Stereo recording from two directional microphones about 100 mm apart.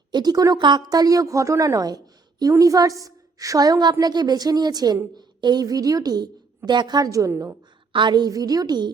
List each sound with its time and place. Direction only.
0.1 s a woman's voice: 45° right (ahead or behind); by 7.5 s 30° right (ahead or behind)
7.9 s a woman's voice: 50° right (ahead or behind)